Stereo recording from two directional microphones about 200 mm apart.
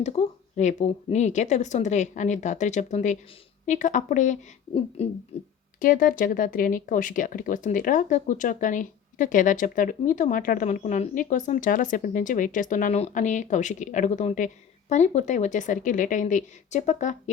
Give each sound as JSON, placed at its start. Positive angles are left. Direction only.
{"t": 0.0, "sound": "speech", "side_deg": 35}